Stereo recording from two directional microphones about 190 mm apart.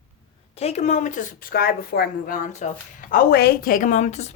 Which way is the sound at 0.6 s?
35° left (ahead or behind).